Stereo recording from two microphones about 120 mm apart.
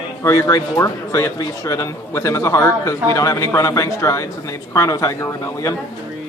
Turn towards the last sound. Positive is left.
turn(degrees=25)  # may be behind; listen again after turning